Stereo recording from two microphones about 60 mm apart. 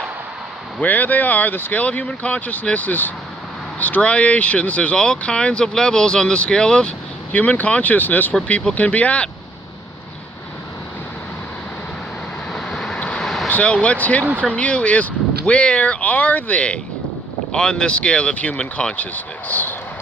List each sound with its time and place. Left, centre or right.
0.8 s speech: left
1.8 s speech: left
7.3 s speech: left
12.5 s vehicle: centre
13.5 s speech: left
19.1 s speech: left